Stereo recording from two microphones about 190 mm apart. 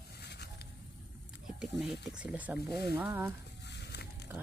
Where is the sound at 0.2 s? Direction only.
60° left (ahead or behind).